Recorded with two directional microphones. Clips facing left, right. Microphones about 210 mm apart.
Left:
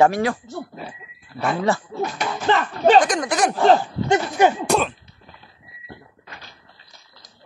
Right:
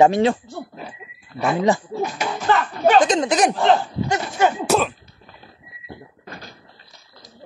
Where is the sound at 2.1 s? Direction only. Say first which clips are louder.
Right 1 dB; 5° right (ahead or behind).